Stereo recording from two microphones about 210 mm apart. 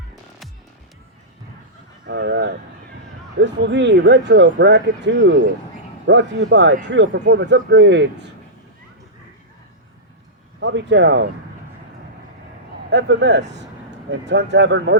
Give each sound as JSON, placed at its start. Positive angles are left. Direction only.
{"t": 2.0, "sound": "speech", "side_deg": -55}
{"t": 10.6, "sound": "speech", "side_deg": -60}
{"t": 12.9, "sound": "speech", "side_deg": -55}